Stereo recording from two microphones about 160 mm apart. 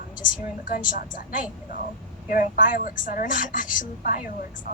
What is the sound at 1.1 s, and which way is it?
A woman's voice, 55° left (ahead or behind).